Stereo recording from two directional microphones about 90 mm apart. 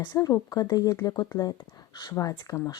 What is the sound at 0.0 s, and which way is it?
Speech, 45° left (ahead or behind).